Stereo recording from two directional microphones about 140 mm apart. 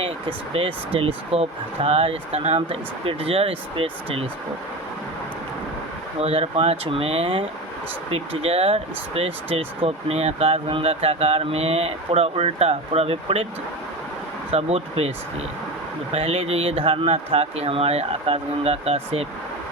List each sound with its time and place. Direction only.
0.0 s speech: 40° right (ahead or behind)
6.1 s speech: 45° right (ahead or behind)
14.5 s speech: 45° right (ahead or behind)
16.1 s speech: 45° right (ahead or behind)